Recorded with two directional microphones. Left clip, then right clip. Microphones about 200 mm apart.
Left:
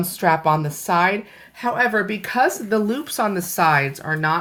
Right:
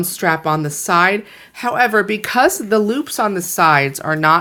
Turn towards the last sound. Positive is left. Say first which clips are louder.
# right 7 dB
turn(degrees=-40)  # may be behind; listen again after turning